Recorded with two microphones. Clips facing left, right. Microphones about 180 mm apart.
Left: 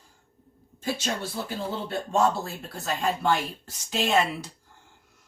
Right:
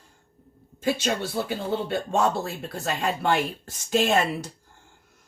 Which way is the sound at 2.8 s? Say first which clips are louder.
Even; 65° right (ahead or behind).